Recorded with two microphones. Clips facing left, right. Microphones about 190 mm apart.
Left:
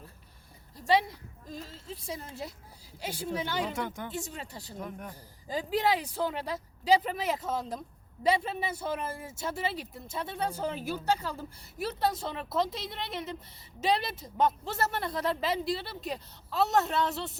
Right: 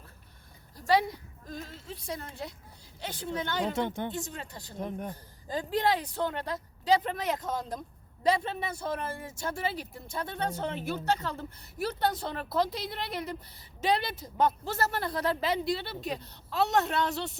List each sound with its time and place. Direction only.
1.6 s a woman's voice: 5° left (ahead or behind)
3.8 s speech: 25° right (ahead or behind)
4.1 s a woman's voice: 5° left (ahead or behind)
4.8 s speech: 25° right (ahead or behind)
5.5 s speech: 5° left (ahead or behind)
11.6 s a woman's voice: 25° left (ahead or behind)
12.2 s speech: centre (ahead or behind)